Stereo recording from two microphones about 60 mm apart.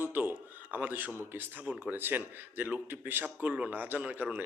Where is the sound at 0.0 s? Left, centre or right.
Right.